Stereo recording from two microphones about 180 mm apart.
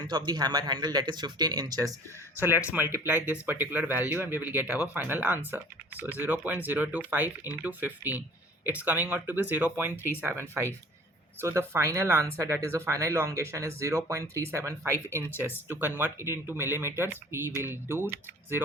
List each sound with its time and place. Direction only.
0.0 s speech: 25° right (ahead or behind)